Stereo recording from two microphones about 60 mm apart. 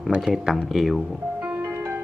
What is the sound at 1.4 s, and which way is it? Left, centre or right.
Music, right.